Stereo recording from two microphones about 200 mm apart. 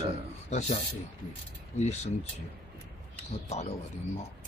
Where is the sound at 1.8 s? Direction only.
35° left (ahead or behind).